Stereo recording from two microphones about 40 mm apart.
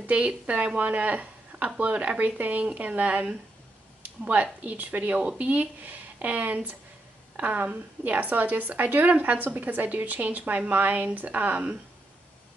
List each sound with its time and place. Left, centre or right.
0.0 s a woman's voice: right